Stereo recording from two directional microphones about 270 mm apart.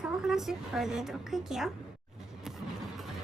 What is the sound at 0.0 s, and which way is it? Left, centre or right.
A woman's voice, centre.